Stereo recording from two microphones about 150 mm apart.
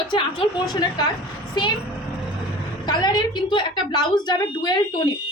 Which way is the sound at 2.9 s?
25° left (ahead or behind).